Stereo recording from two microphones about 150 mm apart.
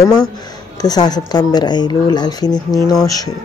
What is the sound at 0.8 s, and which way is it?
Speech, 25° left (ahead or behind).